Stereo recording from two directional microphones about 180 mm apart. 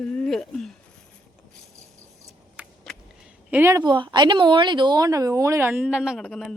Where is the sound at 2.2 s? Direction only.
5° right (ahead or behind).